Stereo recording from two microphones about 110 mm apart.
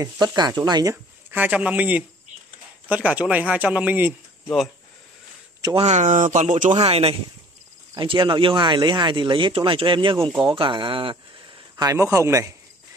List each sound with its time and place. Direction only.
0.4 s speech: 35° right (ahead or behind)
1.3 s speech: 15° right (ahead or behind)
5.8 s speech: 85° right; by 7.2 s 65° right (ahead or behind)
7.9 s speech: 45° right (ahead or behind)
11.7 s a man's voice: 30° right (ahead or behind)